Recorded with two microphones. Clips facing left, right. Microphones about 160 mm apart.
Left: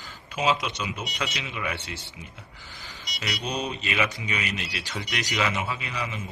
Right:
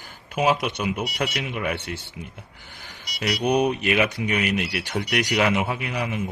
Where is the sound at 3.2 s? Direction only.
65° right (ahead or behind).